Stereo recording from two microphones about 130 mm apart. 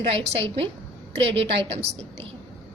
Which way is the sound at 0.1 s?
45° right (ahead or behind).